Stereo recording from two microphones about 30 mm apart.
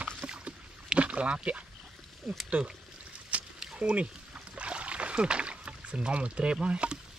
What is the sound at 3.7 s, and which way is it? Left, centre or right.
Speech, right.